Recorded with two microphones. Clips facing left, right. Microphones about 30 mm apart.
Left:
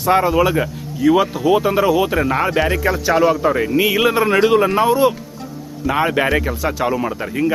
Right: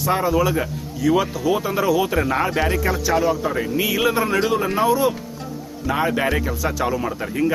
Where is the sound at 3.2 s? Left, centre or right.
Left.